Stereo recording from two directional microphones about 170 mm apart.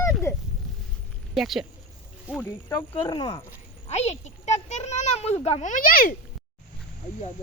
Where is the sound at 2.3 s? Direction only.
10° left (ahead or behind).